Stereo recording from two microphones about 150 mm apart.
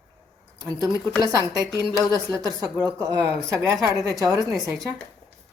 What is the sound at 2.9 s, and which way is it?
Speech, 25° right (ahead or behind).